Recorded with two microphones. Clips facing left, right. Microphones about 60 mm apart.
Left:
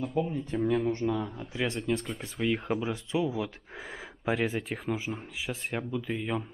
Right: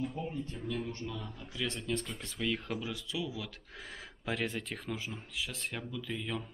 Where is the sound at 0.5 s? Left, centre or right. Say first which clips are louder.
Left 11 dB; left.